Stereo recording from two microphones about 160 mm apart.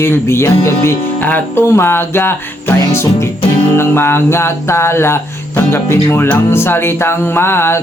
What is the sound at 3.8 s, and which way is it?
Speech, 15° left (ahead or behind).